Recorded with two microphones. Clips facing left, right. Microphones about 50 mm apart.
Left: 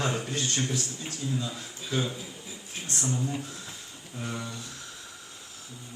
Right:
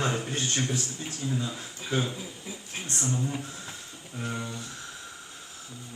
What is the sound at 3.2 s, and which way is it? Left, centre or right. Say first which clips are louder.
Speech: even; centre.